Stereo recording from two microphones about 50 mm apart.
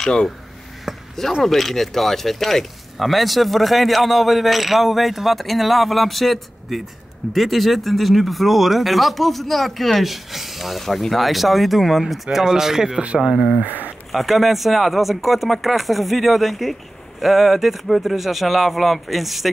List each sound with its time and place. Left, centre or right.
0.0 s speech: centre
0.9 s a sound: centre
1.4 s speech: centre
13.6 s speech: right
14.1 s speech: centre